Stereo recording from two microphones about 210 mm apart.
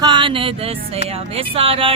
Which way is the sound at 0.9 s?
25° right (ahead or behind).